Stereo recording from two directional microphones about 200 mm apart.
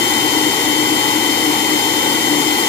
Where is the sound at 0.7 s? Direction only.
20° left (ahead or behind).